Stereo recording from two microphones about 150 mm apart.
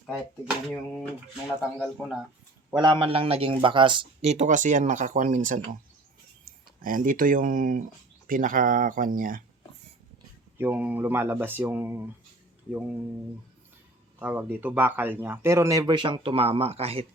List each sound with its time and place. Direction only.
0.1 s speech: centre (ahead or behind)
2.6 s a man's voice: 30° right (ahead or behind)
4.3 s speech: 55° right (ahead or behind)
6.4 s speech: 65° right (ahead or behind)
10.6 s a man's voice: 10° right (ahead or behind)
14.2 s a man's voice: 10° right (ahead or behind)
15.8 s a man's voice: 35° right (ahead or behind)